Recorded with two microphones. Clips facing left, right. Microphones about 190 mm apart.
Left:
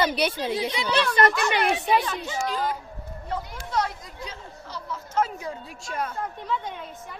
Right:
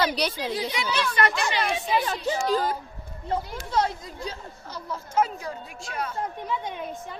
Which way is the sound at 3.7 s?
25° right (ahead or behind).